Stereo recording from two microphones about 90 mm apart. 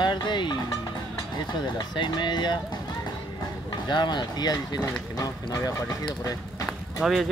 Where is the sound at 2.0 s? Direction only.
55° left (ahead or behind).